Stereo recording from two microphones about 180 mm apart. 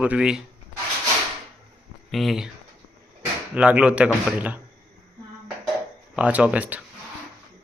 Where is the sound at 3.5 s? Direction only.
5° right (ahead or behind).